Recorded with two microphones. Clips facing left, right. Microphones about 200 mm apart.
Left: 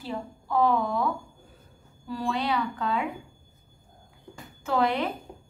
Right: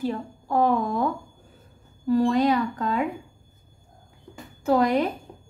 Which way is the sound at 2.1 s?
45° right (ahead or behind).